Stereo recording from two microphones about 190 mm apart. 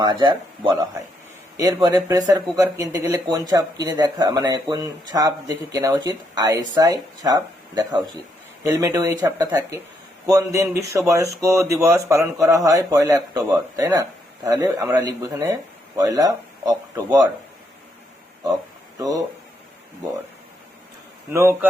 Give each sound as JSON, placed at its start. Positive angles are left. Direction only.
{"t": 0.0, "sound": "speech", "side_deg": -25}
{"t": 18.9, "sound": "speech", "side_deg": -20}
{"t": 21.3, "sound": "speech", "side_deg": -10}